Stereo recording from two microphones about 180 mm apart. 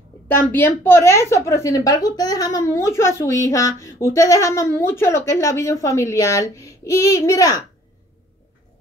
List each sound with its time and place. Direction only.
0.3 s a woman's voice: 10° left (ahead or behind)